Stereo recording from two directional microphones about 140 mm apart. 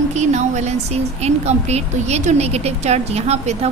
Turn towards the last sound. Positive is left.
turn(degrees=-50)  # may be behind; listen again after turning